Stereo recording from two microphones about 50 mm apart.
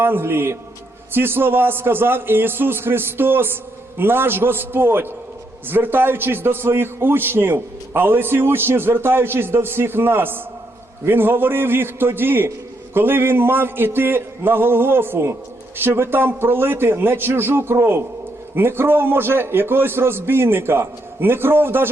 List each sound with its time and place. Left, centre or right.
0.0 s a man's voice: right